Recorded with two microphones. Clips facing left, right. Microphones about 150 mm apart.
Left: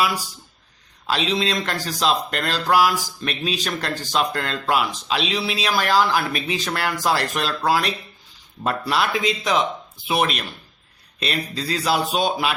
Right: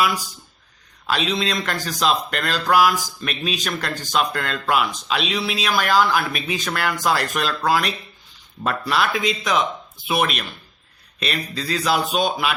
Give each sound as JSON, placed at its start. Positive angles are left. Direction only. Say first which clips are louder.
{"t": 1.0, "sound": "speech", "louder": "even", "side_deg": 30}